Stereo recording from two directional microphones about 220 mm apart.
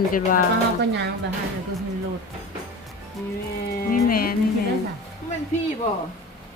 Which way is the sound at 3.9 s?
40° left (ahead or behind).